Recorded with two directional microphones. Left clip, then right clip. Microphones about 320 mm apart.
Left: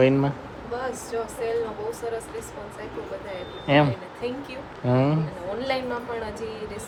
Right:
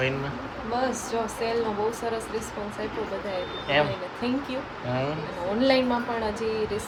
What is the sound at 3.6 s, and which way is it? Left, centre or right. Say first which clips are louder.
Speech: left 4 dB; left.